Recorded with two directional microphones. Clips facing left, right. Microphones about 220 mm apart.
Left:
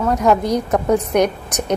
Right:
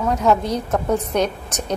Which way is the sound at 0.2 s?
10° left (ahead or behind).